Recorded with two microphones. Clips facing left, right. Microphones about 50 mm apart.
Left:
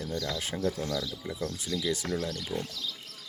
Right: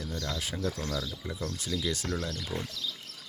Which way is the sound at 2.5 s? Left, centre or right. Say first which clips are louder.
Left 2 dB; centre.